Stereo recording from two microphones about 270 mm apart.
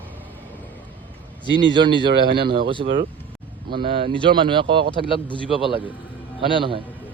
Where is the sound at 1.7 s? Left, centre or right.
Centre.